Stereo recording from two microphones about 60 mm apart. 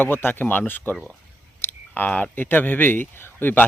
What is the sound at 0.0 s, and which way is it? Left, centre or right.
Speech, left.